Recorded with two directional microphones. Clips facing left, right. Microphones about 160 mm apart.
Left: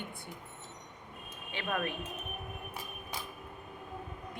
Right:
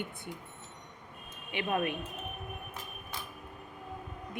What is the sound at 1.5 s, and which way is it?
Speech, 20° right (ahead or behind).